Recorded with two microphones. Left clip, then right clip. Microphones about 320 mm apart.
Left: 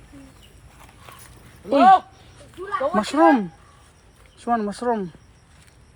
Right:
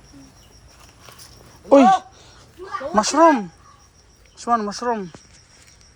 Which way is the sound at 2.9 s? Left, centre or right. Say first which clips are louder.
Right 3 dB; centre.